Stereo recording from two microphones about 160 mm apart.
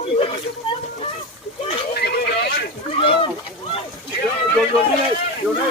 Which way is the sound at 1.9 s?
75° left (ahead or behind).